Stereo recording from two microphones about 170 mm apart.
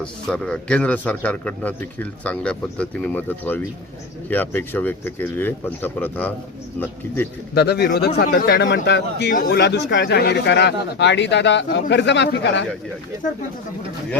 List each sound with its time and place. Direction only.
0.0 s a man's voice: 5° left (ahead or behind)
7.5 s speech: 70° left (ahead or behind)
9.3 s speech: 55° left (ahead or behind)
9.6 s speech: 90° left